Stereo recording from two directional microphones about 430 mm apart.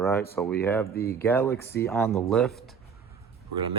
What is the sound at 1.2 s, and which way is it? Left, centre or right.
Speech, centre.